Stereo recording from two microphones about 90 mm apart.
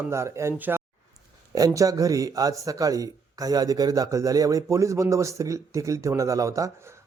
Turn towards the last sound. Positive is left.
turn(degrees=-35)  # may be behind; listen again after turning